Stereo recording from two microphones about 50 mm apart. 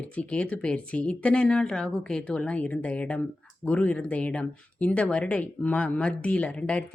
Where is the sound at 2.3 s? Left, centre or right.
Left.